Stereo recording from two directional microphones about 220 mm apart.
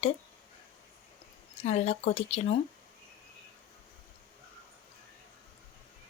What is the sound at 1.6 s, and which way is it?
Speech, 30° left (ahead or behind).